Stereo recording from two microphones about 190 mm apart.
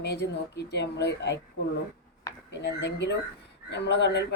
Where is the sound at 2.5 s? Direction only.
65° left (ahead or behind).